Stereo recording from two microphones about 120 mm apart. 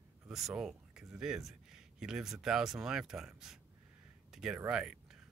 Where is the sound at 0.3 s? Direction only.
5° right (ahead or behind).